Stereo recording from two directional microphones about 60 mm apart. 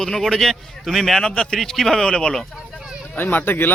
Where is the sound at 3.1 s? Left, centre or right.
Left.